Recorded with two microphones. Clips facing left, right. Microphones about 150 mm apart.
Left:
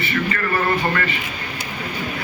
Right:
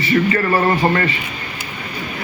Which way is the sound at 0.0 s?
30° right (ahead or behind).